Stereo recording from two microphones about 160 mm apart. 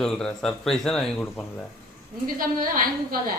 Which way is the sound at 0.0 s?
5° left (ahead or behind).